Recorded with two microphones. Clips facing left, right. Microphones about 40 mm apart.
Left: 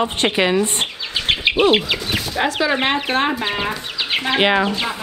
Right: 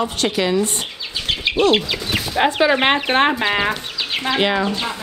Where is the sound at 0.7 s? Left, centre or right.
Left.